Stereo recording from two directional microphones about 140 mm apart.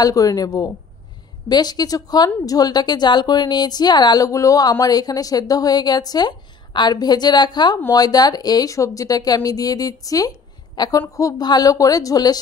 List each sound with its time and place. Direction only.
0.0 s a woman's voice: 25° left (ahead or behind)